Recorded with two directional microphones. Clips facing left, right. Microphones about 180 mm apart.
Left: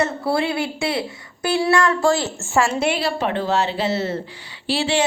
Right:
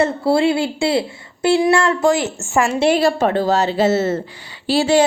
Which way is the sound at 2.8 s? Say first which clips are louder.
Right 6 dB; 45° right (ahead or behind).